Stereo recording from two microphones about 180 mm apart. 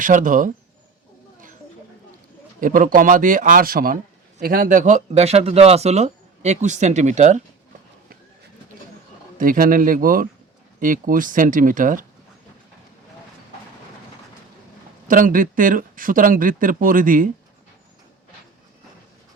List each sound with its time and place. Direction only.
0.0 s speech: 45° right (ahead or behind)
2.6 s speech: 50° right (ahead or behind)
9.4 s speech: 50° right (ahead or behind)
15.0 s speech: 50° right (ahead or behind)